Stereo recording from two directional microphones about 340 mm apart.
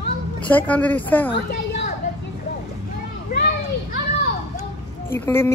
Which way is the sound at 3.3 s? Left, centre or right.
Left.